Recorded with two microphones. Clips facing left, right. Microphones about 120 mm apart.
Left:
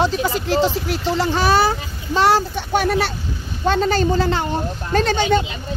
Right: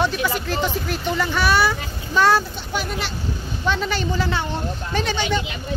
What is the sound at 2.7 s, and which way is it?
Speech, 65° left (ahead or behind).